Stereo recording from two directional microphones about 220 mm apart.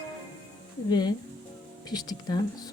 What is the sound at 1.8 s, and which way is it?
Speech, 20° left (ahead or behind).